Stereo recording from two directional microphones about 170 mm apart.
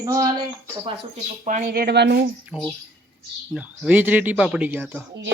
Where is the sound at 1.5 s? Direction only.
55° right (ahead or behind); by 2.2 s 80° right.